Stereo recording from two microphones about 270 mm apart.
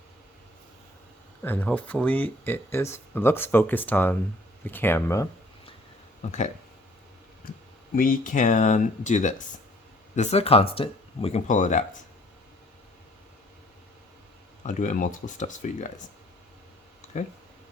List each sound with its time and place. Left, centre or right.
1.4 s speech: centre
6.2 s speech: left
7.9 s speech: left
14.6 s speech: left